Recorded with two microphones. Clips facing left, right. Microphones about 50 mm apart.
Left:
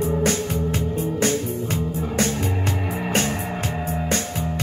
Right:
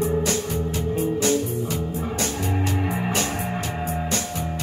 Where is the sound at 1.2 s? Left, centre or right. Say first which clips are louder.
Even; left.